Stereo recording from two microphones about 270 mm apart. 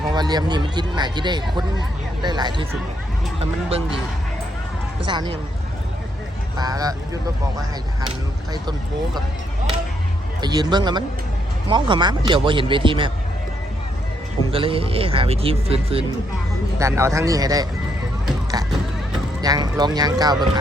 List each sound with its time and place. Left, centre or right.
0.1 s a man's voice: centre
5.0 s a man's voice: centre
6.6 s a man's voice: centre
10.4 s a man's voice: centre
14.5 s speech: centre
16.7 s a man's voice: centre
19.4 s a man's voice: centre